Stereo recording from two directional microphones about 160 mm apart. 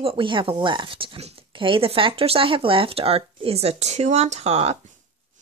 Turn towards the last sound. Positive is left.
turn(degrees=-40)  # may be behind; listen again after turning